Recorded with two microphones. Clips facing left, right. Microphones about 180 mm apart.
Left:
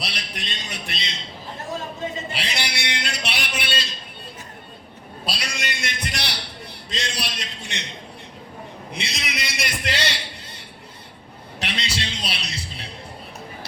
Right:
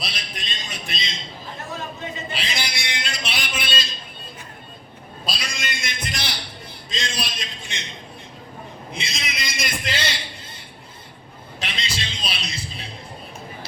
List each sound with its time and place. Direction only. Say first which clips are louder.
0.0 s speech: left 1 dB; 65° left (ahead or behind)
2.4 s a sound: left 1 dB; 65° left (ahead or behind)
5.2 s speech: left 1 dB; 65° left (ahead or behind)
8.9 s a man's voice: left 1 dB; 65° left (ahead or behind)
11.6 s music: left 2 dB; 65° left (ahead or behind)